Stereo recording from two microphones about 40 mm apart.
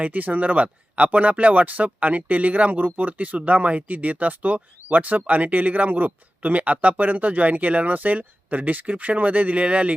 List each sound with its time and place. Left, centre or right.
0.0 s speech: right